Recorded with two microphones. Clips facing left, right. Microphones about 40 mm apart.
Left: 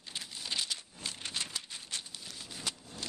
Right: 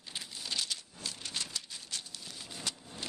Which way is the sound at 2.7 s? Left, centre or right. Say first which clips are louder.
Left 1 dB; centre.